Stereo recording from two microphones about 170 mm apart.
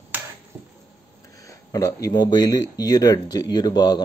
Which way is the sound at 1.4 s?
20° left (ahead or behind).